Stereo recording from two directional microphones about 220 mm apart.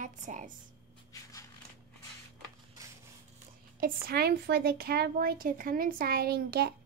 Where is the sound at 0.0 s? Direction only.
35° right (ahead or behind).